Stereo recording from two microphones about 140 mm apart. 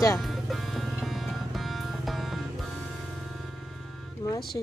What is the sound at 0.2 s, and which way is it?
Music, centre (ahead or behind).